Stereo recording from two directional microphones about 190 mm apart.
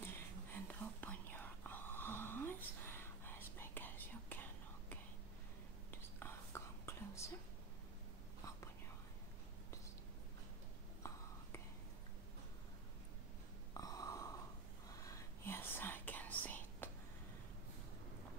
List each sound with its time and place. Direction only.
0.0 s whispering: 10° left (ahead or behind)
13.7 s a sound: 20° left (ahead or behind)
14.9 s whispering: 20° left (ahead or behind)